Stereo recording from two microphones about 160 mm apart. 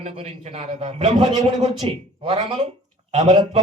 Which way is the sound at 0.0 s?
40° right (ahead or behind).